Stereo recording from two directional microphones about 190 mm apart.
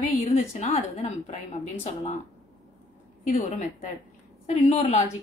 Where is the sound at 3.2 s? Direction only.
35° left (ahead or behind).